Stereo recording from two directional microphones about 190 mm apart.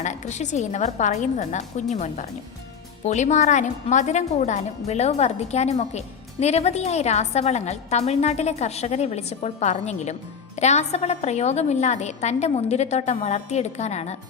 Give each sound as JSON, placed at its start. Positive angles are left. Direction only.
{"t": 0.0, "sound": "a woman's voice", "side_deg": 40}